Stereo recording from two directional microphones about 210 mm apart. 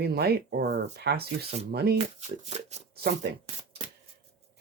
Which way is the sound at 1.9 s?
30° right (ahead or behind).